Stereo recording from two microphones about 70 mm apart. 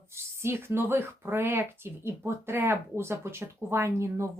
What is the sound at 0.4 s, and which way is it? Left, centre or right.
Speech, right.